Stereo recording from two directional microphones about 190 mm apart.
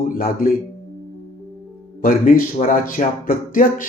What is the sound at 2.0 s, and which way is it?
Speech, 45° left (ahead or behind).